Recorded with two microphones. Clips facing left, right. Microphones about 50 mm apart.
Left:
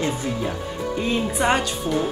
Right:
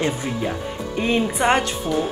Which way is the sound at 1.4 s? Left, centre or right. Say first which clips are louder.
Right 1 dB; centre.